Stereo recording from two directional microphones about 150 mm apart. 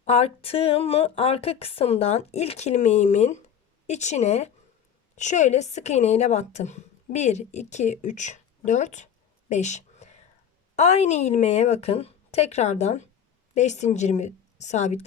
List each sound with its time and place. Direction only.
0.0 s a woman's voice: 45° left (ahead or behind)
9.5 s a sound: 50° left (ahead or behind)
10.8 s a woman's voice: 50° left (ahead or behind)